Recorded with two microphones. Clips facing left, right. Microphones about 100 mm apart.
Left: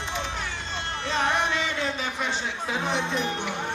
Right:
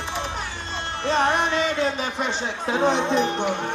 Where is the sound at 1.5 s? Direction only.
55° right (ahead or behind).